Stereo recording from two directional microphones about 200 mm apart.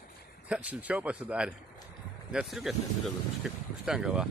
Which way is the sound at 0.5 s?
5° right (ahead or behind).